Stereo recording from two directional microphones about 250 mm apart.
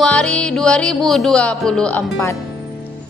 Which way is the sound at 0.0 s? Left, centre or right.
Centre.